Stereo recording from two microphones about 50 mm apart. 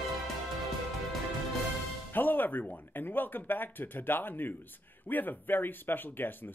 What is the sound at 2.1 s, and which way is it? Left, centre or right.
Speech, left.